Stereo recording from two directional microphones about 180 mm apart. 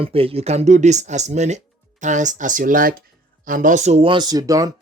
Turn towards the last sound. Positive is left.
turn(degrees=-20)  # may be behind; listen again after turning